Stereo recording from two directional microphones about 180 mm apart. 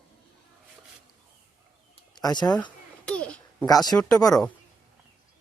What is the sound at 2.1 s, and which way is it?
Speech, 25° left (ahead or behind).